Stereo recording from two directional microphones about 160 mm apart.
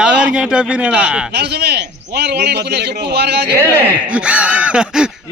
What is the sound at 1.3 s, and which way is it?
A man's voice, 90° right.